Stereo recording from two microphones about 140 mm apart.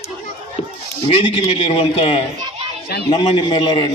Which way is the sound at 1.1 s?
40° left (ahead or behind).